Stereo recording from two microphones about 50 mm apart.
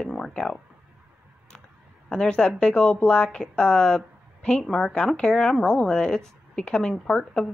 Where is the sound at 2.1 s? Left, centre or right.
Centre.